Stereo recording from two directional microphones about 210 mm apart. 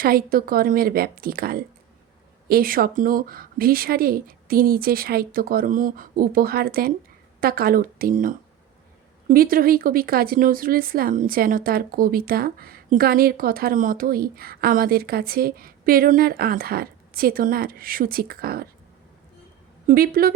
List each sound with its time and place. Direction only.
0.0 s speech: 45° right (ahead or behind)
19.9 s speech: 45° right (ahead or behind)